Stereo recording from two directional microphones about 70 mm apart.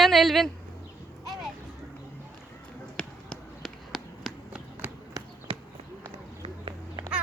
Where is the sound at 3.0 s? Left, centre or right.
Centre.